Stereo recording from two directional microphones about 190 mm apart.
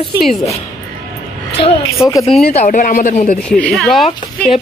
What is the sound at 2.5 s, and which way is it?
Speech, 40° left (ahead or behind).